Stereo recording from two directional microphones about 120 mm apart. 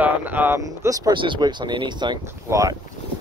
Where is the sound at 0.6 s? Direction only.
30° right (ahead or behind).